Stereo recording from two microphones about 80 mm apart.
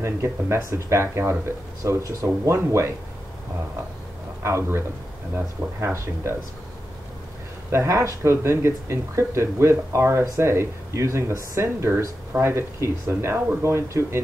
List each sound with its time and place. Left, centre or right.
0.0 s speech: right
4.4 s a man's voice: right
7.7 s speech: right